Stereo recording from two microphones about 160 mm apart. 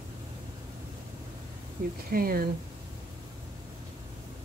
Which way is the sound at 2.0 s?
65° right (ahead or behind).